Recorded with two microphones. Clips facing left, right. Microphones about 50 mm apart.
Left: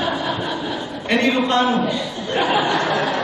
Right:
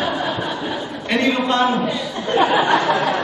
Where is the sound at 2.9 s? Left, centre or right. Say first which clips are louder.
Right 1 dB; centre.